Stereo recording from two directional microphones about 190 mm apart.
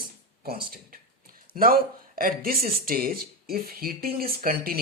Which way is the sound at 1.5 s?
50° right (ahead or behind).